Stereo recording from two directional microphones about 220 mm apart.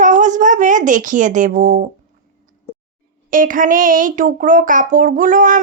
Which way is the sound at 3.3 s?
40° right (ahead or behind).